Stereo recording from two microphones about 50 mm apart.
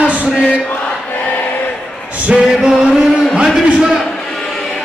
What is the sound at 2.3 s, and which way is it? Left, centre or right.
Music, centre.